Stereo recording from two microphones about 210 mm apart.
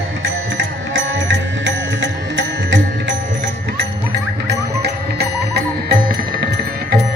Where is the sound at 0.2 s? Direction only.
60° right (ahead or behind).